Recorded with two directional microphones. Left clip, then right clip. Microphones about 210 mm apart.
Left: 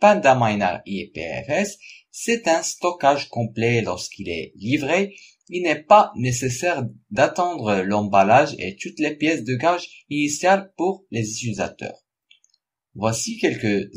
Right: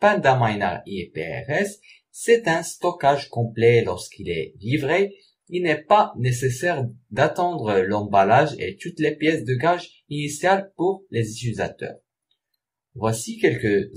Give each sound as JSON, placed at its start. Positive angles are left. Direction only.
{"t": 0.0, "sound": "speech", "side_deg": 35}
{"t": 13.0, "sound": "speech", "side_deg": 35}